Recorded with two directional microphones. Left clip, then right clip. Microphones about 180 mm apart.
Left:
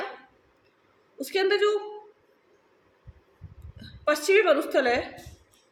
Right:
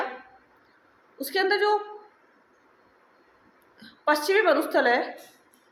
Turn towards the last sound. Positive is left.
turn(degrees=25)  # may be behind; listen again after turning